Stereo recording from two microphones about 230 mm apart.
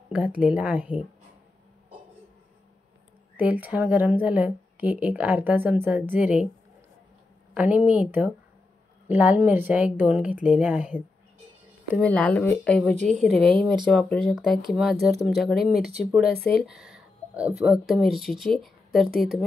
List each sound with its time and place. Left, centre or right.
0.1 s speech: centre
3.3 s speech: centre
7.5 s speech: centre
12.0 s speech: centre
12.9 s a woman's voice: right
13.2 s speech: centre